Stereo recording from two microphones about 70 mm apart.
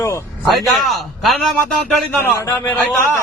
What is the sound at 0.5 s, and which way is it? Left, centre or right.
Speech, centre.